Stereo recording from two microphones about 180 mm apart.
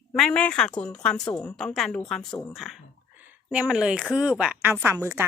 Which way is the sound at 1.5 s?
Centre (ahead or behind).